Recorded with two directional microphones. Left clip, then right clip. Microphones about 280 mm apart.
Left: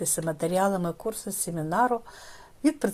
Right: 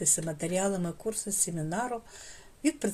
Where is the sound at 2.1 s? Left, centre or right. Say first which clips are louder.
Left 3 dB; left.